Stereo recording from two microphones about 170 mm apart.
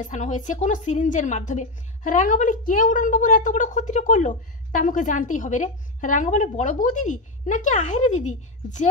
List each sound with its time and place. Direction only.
0.0 s a woman's voice: 45° left (ahead or behind)